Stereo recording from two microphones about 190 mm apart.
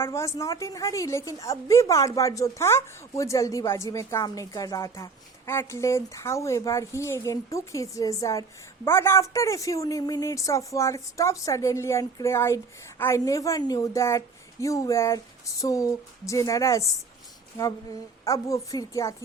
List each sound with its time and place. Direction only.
0.0 s a woman's voice: 15° left (ahead or behind)
18.3 s a woman's voice: 15° left (ahead or behind)